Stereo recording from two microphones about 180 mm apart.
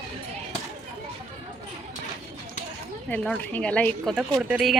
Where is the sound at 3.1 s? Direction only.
5° left (ahead or behind).